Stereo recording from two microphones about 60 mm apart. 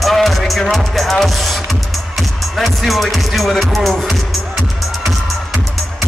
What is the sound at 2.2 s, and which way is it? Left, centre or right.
Speech, centre.